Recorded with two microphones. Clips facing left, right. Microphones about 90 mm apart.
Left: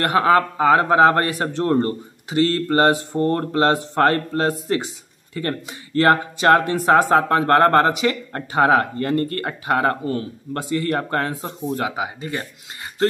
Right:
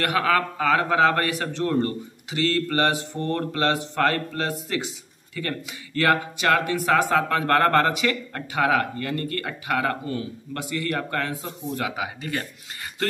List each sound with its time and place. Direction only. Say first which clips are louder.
0.0 s a man's voice: left 6 dB; 30° left (ahead or behind)